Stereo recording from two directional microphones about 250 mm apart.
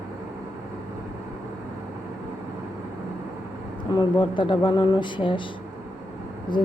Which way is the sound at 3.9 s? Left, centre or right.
Centre.